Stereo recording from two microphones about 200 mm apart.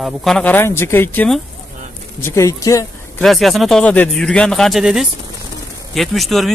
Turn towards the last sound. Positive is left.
turn(degrees=0)  # may be behind; listen again after turning